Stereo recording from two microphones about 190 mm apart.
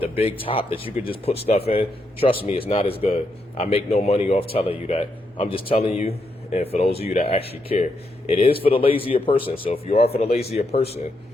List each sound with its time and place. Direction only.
0.2 s speech: 30° left (ahead or behind)